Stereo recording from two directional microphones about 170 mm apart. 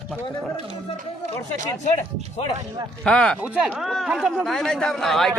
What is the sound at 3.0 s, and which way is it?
Speech, 5° left (ahead or behind).